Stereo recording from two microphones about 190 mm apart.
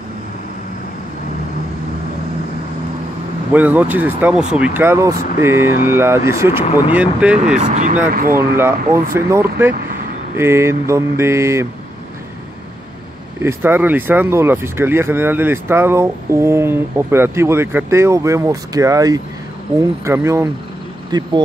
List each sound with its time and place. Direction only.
3.5 s speech: 10° right (ahead or behind)
7.7 s speech: 40° right (ahead or behind)
8.4 s speech: 10° right (ahead or behind)
13.4 s speech: 10° right (ahead or behind)